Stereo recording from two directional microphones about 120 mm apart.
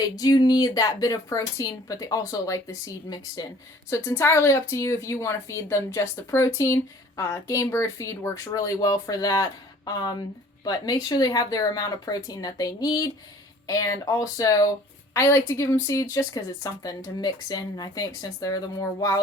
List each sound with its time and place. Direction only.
0.2 s speech: 35° left (ahead or behind)